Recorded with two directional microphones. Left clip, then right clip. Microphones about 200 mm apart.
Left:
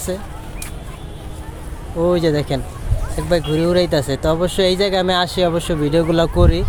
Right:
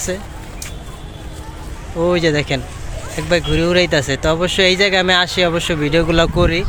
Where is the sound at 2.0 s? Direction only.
Centre (ahead or behind).